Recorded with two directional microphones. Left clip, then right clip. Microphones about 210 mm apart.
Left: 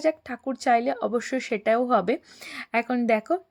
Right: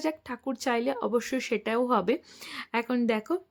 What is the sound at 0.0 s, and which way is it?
Speech, 5° left (ahead or behind).